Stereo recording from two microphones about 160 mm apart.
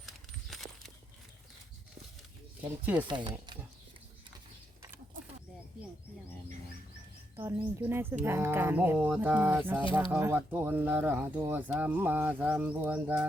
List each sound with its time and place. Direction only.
0.0 s a sound: centre (ahead or behind)
2.6 s speech: 10° right (ahead or behind)
3.1 s speech: 30° right (ahead or behind)
7.3 s speech: 15° right (ahead or behind)